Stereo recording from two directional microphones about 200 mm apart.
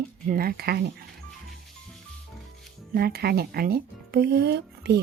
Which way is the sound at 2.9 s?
50° right (ahead or behind).